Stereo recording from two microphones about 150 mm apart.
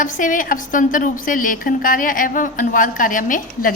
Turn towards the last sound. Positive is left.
turn(degrees=65)  # may be behind; listen again after turning